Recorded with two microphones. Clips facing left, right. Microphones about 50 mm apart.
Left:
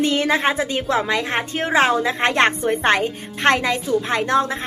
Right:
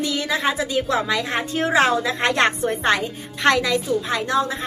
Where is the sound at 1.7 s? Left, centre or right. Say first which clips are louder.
Left 2 dB; left.